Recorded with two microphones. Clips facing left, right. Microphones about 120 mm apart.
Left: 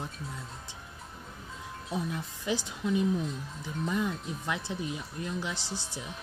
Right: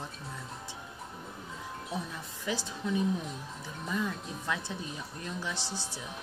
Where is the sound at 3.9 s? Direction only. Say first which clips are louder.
Left 1 dB; 15° left (ahead or behind).